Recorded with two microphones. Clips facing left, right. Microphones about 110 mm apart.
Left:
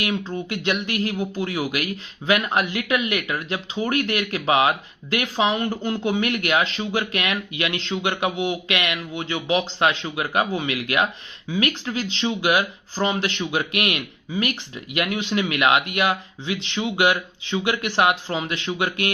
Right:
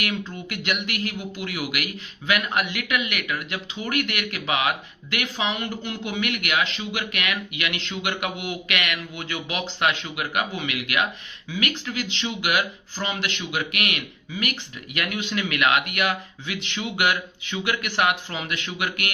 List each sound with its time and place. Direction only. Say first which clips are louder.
0.0 s speech: left 4 dB; 30° left (ahead or behind)